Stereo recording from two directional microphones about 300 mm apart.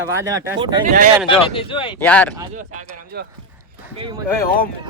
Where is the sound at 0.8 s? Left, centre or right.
Right.